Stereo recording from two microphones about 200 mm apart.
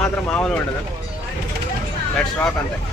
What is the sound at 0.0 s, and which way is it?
Speech, 5° left (ahead or behind).